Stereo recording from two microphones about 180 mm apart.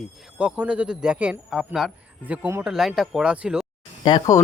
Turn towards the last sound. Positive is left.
turn(degrees=20)  # may be behind; listen again after turning